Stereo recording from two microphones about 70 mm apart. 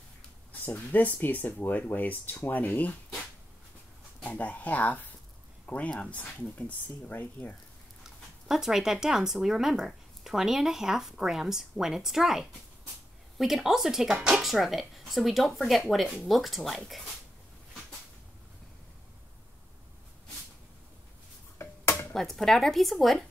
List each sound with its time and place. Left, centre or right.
0.5 s speech: left
4.2 s speech: left
8.5 s speech: centre
21.5 s a sound: left
22.1 s speech: centre